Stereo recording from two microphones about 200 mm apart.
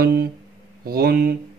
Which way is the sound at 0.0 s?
50° right (ahead or behind).